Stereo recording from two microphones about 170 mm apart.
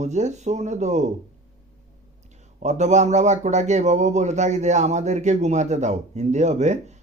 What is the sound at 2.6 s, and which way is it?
Speech, 45° right (ahead or behind).